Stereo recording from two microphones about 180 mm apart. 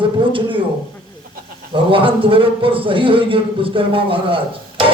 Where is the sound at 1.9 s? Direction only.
30° right (ahead or behind).